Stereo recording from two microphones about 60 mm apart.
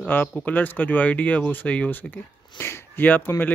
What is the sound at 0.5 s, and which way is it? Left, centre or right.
Speech, left.